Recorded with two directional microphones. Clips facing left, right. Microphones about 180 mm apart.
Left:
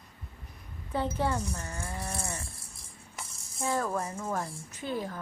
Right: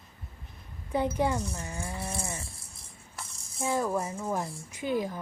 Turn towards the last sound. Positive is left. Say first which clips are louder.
# right 4 dB
turn(degrees=-15)  # may be behind; listen again after turning